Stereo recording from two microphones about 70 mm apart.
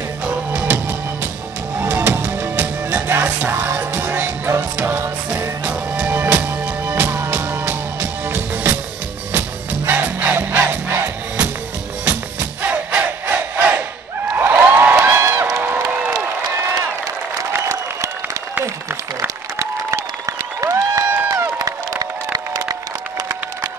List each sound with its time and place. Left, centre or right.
0.2 s music: centre; by 5.1 s right
5.6 s music: centre
9.8 s music: right
12.6 s crowd: right
14.3 s a sound: right
15.1 s a sound: right
17.5 s applause: right
20.6 s a sound: right
21.5 s music: right